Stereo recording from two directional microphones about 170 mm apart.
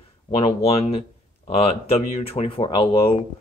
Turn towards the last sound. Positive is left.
turn(degrees=30)  # may be behind; listen again after turning